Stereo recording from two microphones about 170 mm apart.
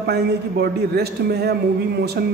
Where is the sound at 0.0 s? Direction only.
75° right (ahead or behind).